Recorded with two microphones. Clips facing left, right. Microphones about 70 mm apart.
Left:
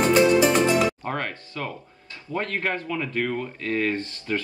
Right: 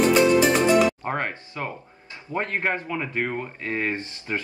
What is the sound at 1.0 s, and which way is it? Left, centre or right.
Speech, right.